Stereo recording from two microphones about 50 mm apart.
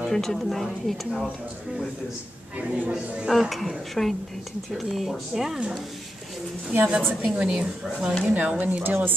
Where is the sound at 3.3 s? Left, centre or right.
Centre.